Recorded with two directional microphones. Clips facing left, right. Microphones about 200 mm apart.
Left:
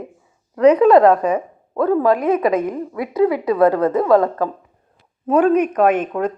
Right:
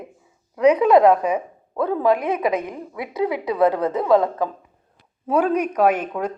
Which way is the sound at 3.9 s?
15° right (ahead or behind).